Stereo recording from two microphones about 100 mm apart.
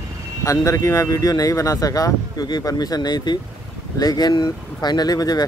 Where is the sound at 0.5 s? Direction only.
30° left (ahead or behind).